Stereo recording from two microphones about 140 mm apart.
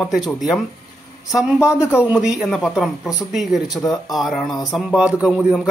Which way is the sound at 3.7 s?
25° left (ahead or behind).